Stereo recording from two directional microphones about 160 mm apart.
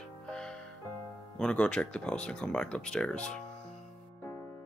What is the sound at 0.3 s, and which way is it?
Music, 5° left (ahead or behind).